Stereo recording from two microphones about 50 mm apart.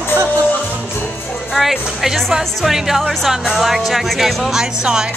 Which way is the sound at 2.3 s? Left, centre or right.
Centre.